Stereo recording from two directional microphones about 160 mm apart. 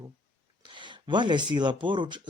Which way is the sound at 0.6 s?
30° right (ahead or behind).